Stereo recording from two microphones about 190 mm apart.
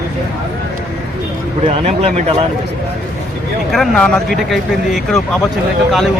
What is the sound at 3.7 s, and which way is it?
Speech, 5° left (ahead or behind).